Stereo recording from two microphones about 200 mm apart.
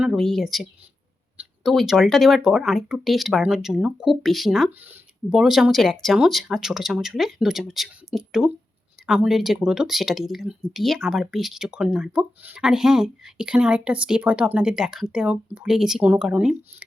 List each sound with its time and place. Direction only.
0.0 s speech: centre (ahead or behind)